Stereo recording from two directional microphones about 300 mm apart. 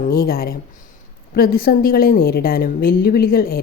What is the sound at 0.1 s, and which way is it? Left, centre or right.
A woman's voice, left.